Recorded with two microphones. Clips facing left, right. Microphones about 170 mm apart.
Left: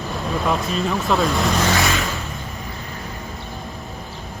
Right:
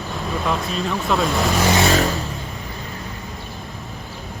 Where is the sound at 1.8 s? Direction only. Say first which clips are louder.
Right 5 dB; 35° right (ahead or behind).